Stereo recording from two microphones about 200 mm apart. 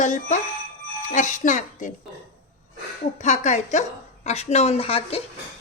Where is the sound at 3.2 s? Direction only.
35° left (ahead or behind).